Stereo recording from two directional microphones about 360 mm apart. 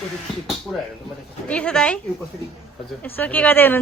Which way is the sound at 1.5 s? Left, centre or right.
Centre.